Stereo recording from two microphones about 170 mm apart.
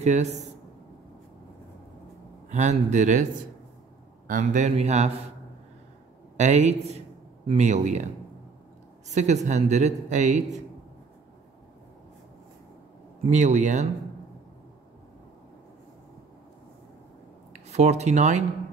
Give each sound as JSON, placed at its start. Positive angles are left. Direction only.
{"t": 0.0, "sound": "a man's voice", "side_deg": -40}
{"t": 2.5, "sound": "speech", "side_deg": -45}
{"t": 4.3, "sound": "speech", "side_deg": -45}
{"t": 6.3, "sound": "a man's voice", "side_deg": -45}
{"t": 9.1, "sound": "speech", "side_deg": -45}
{"t": 13.2, "sound": "speech", "side_deg": -45}
{"t": 17.5, "sound": "speech", "side_deg": -40}